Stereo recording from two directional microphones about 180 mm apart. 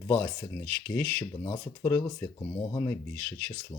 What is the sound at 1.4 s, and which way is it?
Speech, 20° left (ahead or behind).